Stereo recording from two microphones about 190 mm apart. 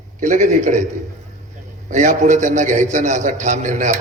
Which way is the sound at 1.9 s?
40° right (ahead or behind).